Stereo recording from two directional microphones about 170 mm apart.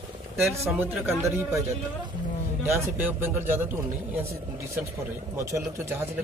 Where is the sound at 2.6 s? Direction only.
15° right (ahead or behind).